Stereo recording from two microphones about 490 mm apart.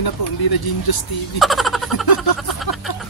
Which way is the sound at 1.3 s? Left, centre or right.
Centre.